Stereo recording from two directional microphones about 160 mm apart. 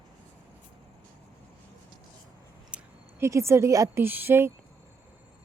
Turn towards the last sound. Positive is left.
turn(degrees=-15)  # may be behind; listen again after turning